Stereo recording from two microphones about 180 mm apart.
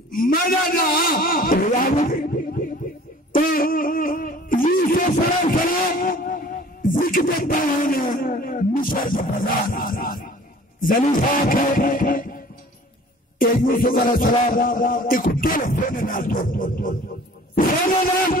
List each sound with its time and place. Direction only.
0.1 s a man's voice: 50° left (ahead or behind)
2.0 s music: 50° left (ahead or behind)
10.8 s a man's voice: 50° left (ahead or behind)
11.1 s music: 50° left (ahead or behind)
13.4 s music: 50° left (ahead or behind)